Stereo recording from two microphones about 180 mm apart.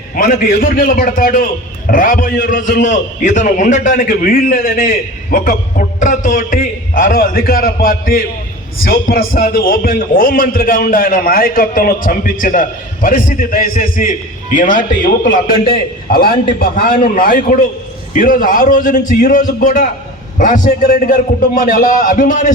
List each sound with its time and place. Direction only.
0.2 s a man's voice: 50° left (ahead or behind)